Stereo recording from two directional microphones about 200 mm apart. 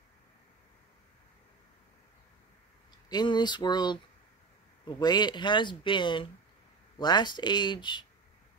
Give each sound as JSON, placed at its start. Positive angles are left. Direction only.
{"t": 3.1, "sound": "speech", "side_deg": 20}